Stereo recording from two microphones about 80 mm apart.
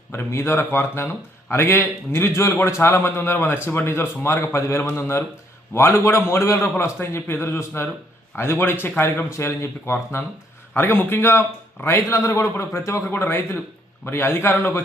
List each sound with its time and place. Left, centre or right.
0.1 s a man's voice: left